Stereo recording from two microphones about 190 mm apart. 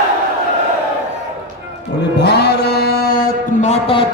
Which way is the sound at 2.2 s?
60° left (ahead or behind).